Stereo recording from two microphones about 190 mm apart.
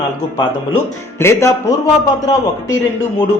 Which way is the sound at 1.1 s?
15° left (ahead or behind).